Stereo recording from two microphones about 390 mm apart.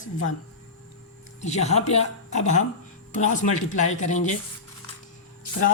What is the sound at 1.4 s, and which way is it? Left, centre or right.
A woman's voice, centre.